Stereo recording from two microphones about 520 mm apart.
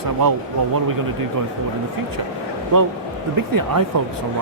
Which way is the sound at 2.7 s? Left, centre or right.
Right.